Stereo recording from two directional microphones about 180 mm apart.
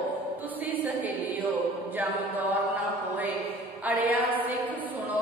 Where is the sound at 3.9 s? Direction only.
10° right (ahead or behind).